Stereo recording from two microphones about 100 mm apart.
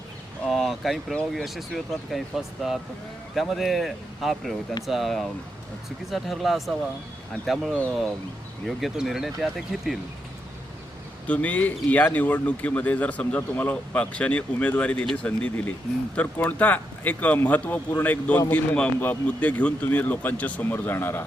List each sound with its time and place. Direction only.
0.4 s a sound: centre (ahead or behind)
1.3 s speech: centre (ahead or behind)
11.3 s speech: 15° left (ahead or behind)